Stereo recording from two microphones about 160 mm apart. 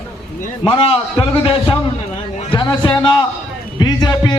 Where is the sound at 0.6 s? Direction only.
35° left (ahead or behind).